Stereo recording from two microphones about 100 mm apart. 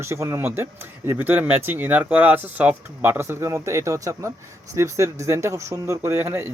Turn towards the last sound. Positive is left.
turn(degrees=-30)  # may be behind; listen again after turning